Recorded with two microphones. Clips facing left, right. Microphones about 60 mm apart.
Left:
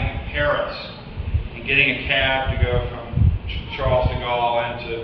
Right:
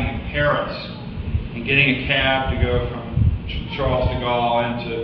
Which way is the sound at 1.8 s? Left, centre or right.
Centre.